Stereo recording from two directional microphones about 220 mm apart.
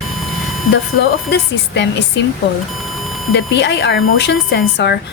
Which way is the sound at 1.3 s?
55° left (ahead or behind).